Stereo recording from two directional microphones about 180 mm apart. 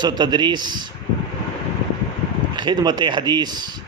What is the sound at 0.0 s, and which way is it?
Speech, 25° right (ahead or behind).